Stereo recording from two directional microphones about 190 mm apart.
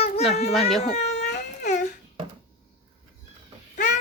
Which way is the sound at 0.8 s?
35° left (ahead or behind).